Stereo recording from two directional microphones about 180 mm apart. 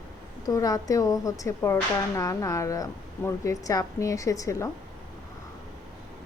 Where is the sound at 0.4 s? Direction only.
20° left (ahead or behind).